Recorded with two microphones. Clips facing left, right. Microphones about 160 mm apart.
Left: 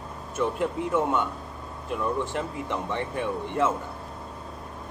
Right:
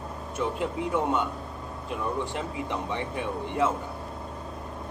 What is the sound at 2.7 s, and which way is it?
A man's voice, 15° right (ahead or behind).